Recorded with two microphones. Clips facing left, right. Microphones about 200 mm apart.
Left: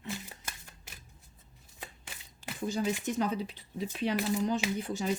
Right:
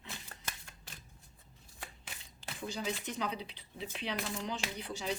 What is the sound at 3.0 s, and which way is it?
Speech, 45° left (ahead or behind).